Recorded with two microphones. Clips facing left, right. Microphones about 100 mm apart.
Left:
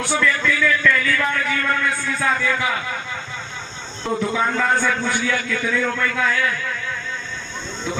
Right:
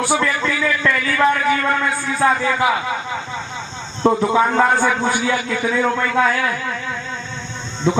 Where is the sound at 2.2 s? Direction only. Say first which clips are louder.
Right 5 dB; 35° right (ahead or behind).